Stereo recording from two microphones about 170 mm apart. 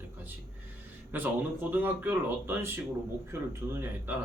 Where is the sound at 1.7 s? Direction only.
10° right (ahead or behind).